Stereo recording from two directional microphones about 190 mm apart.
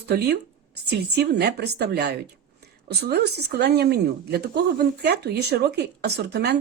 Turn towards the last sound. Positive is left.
turn(degrees=-60)  # may be behind; listen again after turning